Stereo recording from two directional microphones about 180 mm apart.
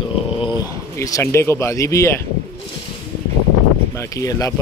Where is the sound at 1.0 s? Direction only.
15° left (ahead or behind).